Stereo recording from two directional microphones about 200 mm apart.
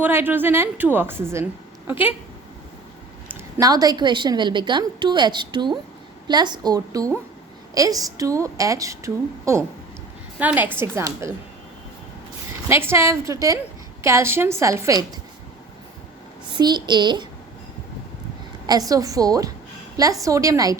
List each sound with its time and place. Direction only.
0.0 s a woman's voice: 10° right (ahead or behind)
3.2 s a woman's voice: 20° right (ahead or behind)
12.6 s a woman's voice: 10° right (ahead or behind)
16.6 s a woman's voice: 20° right (ahead or behind)
18.6 s a woman's voice: 20° right (ahead or behind)